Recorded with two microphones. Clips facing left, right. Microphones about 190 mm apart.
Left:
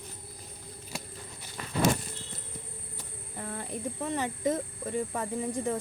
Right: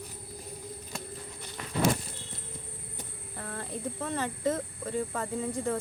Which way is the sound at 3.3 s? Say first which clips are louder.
Left 1 dB; 15° left (ahead or behind).